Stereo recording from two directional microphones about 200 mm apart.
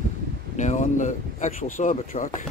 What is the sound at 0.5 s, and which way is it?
Speech, 35° left (ahead or behind).